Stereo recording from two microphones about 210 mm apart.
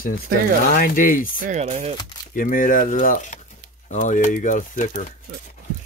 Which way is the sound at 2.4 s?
40° left (ahead or behind).